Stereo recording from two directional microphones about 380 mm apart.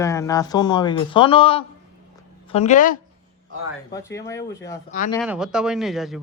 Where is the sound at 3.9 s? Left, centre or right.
Centre.